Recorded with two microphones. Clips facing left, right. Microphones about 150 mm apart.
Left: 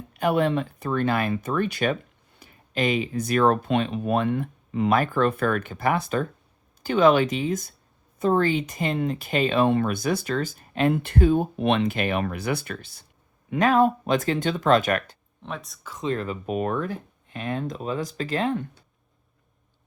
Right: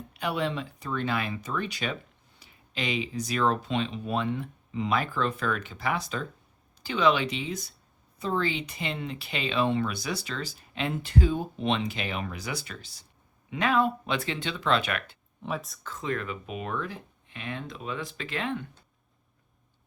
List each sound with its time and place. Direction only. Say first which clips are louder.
0.1 s speech: left 8 dB; 50° left (ahead or behind)
13.5 s speech: left 6 dB; 45° left (ahead or behind)
15.4 s speech: right 2 dB; centre (ahead or behind)
16.0 s speech: left 5 dB; 35° left (ahead or behind)